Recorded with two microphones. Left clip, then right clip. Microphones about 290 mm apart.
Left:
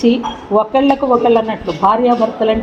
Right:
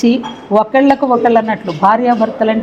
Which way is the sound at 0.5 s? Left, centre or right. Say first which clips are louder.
Right 2 dB; right.